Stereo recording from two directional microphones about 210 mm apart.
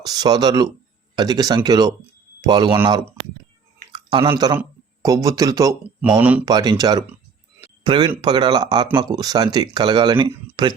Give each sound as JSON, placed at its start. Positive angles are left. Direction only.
{"t": 0.0, "sound": "speech", "side_deg": -20}
{"t": 3.9, "sound": "a sound", "side_deg": -25}
{"t": 4.3, "sound": "speech", "side_deg": -15}
{"t": 6.4, "sound": "speech", "side_deg": -20}
{"t": 7.6, "sound": "a sound", "side_deg": -20}
{"t": 8.2, "sound": "speech", "side_deg": -20}